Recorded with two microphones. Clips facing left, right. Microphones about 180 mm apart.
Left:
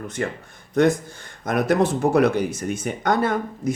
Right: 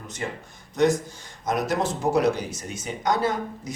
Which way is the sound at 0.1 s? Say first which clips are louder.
Left 2 dB; 55° left (ahead or behind).